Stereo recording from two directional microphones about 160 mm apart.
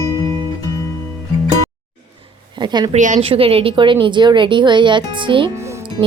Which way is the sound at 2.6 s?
30° right (ahead or behind).